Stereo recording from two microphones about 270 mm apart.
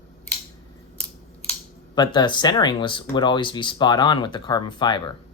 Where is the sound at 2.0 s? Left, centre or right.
Centre.